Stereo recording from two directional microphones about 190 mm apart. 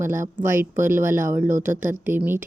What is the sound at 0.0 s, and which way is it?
Speech, 15° right (ahead or behind).